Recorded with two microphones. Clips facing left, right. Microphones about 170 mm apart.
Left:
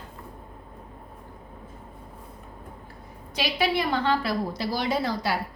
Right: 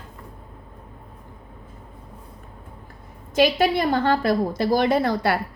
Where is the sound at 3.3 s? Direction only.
45° right (ahead or behind).